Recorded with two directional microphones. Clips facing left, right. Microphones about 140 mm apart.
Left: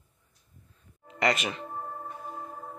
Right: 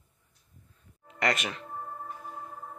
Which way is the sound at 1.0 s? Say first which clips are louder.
Left 2 dB; centre (ahead or behind).